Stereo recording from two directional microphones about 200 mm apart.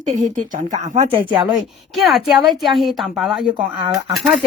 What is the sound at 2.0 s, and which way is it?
A woman's voice, centre (ahead or behind).